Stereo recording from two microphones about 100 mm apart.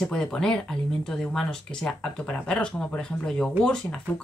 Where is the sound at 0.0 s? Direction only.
10° left (ahead or behind).